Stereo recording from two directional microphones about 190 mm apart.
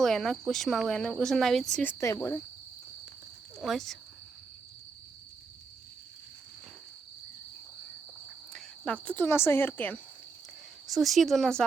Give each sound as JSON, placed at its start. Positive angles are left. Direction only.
{"t": 0.0, "sound": "speech", "side_deg": 0}
{"t": 3.6, "sound": "speech", "side_deg": 0}
{"t": 8.5, "sound": "cricket", "side_deg": 5}
{"t": 10.8, "sound": "speech", "side_deg": 0}